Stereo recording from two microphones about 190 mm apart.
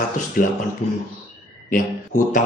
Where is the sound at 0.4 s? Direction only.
45° left (ahead or behind).